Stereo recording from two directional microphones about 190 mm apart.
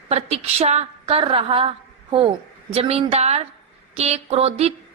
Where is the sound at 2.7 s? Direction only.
30° right (ahead or behind).